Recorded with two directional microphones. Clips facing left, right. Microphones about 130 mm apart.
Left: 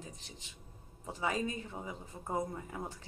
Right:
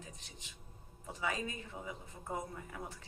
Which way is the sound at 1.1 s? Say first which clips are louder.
Left 4 dB; 30° left (ahead or behind).